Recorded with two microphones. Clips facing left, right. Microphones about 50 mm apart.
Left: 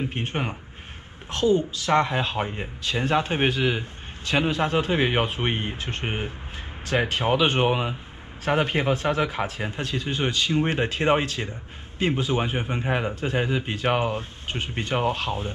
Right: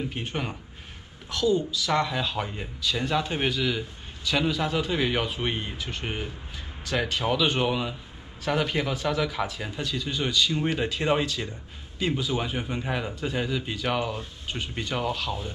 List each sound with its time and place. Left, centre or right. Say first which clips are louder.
0.1 s speech: left 3 dB; left